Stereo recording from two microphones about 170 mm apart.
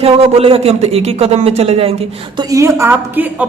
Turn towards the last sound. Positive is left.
turn(degrees=-10)  # may be behind; listen again after turning